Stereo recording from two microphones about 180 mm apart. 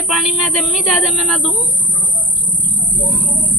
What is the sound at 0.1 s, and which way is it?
A woman's voice, centre (ahead or behind).